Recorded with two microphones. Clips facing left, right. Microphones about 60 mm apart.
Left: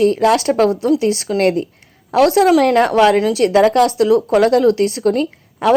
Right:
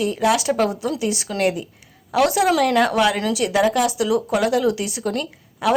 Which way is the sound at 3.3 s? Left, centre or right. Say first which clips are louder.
Left 7 dB; left.